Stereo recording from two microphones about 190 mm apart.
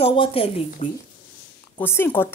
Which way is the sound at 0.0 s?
30° left (ahead or behind).